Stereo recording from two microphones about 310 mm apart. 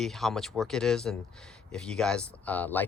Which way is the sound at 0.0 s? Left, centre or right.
Centre.